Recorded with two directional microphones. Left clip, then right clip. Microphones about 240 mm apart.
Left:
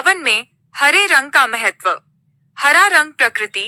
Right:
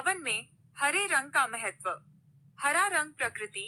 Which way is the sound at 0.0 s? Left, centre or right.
Left.